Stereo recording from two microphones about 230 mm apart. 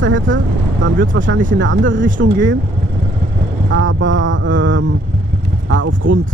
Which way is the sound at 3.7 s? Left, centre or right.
Right.